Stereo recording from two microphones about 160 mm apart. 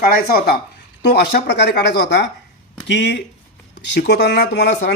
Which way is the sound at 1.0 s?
90° left.